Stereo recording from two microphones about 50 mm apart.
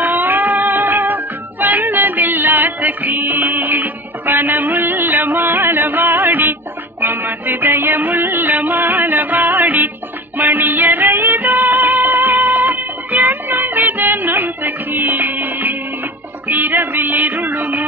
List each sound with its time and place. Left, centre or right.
0.0 s music: right